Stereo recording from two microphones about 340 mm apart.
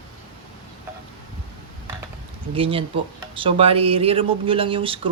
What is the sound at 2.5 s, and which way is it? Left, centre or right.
Speech, centre.